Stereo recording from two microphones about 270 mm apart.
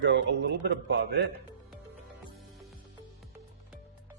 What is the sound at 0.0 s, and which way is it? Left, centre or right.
Speech, right.